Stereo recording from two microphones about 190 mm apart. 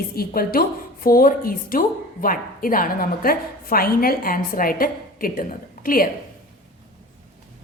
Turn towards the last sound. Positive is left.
turn(degrees=50)  # may be behind; listen again after turning